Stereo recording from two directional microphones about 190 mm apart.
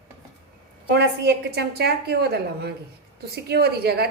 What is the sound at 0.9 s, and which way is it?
A woman's voice, 60° right (ahead or behind).